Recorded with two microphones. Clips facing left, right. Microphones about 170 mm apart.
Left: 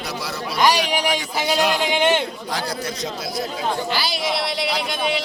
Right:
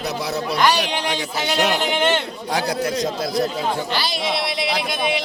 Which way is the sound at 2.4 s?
65° right (ahead or behind).